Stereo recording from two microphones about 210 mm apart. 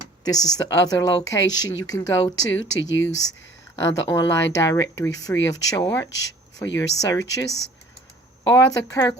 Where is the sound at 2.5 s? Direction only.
65° left (ahead or behind).